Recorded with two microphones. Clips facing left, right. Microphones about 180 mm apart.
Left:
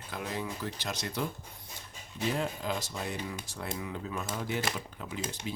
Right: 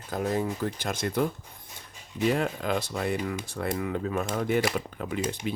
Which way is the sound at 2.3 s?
65° right (ahead or behind).